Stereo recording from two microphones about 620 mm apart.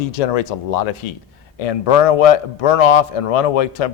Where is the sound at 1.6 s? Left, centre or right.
Left.